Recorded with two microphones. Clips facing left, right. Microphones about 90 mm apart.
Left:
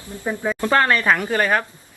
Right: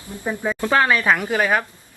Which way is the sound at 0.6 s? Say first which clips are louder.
Even; 5° right (ahead or behind).